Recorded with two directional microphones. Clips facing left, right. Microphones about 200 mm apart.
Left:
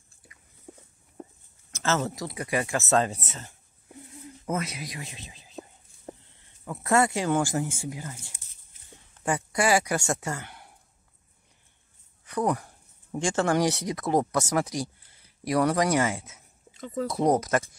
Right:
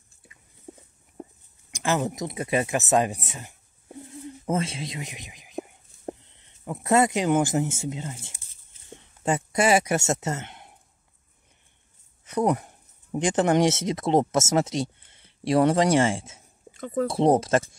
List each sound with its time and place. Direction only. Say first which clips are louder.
0.7 s walk: right 3 dB; 15° right (ahead or behind)
1.7 s speech: right 2 dB; 15° right (ahead or behind)
4.1 s a sound: right 4 dB; 30° right (ahead or behind)
6.1 s speech: even; 20° right (ahead or behind)
12.3 s speech: right 3 dB; 20° right (ahead or behind)
16.7 s speech: right 4 dB; 50° right (ahead or behind)
17.1 s speech: right 3 dB; 30° right (ahead or behind)